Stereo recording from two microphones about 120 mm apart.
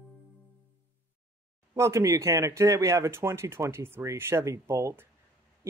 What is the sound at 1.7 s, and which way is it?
Speech, 25° right (ahead or behind).